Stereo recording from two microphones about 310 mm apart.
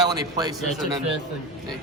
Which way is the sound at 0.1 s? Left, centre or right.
Centre.